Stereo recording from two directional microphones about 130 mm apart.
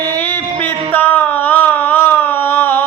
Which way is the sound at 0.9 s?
15° left (ahead or behind).